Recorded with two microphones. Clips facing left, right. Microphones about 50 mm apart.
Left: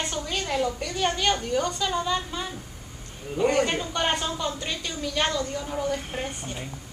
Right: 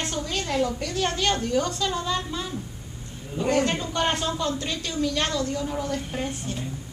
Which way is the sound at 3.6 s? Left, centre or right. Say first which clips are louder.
Right 1 dB; centre.